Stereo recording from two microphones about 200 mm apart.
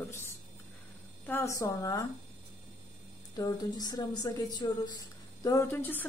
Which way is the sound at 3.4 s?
20° left (ahead or behind).